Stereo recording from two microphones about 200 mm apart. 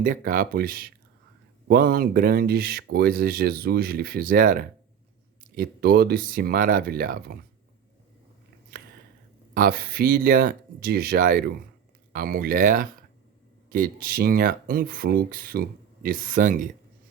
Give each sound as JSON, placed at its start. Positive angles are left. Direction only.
{"t": 0.0, "sound": "speech", "side_deg": -45}
{"t": 9.6, "sound": "speech", "side_deg": -50}